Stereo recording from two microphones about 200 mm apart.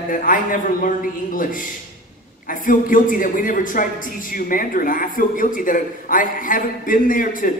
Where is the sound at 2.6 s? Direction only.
45° left (ahead or behind).